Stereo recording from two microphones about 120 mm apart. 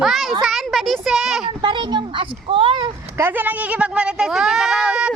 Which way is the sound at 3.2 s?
15° right (ahead or behind).